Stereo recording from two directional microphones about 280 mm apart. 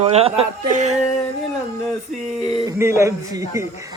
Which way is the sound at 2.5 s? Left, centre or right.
Centre.